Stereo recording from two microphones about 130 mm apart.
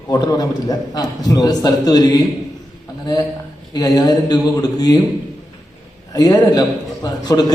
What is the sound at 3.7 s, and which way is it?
A man's voice, 30° left (ahead or behind).